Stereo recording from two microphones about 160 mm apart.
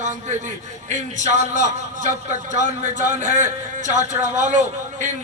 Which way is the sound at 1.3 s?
50° right (ahead or behind).